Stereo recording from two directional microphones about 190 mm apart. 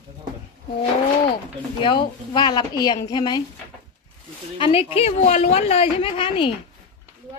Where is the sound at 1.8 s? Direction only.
25° left (ahead or behind).